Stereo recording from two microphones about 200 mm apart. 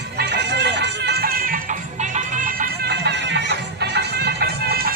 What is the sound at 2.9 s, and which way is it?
Music, 60° right (ahead or behind).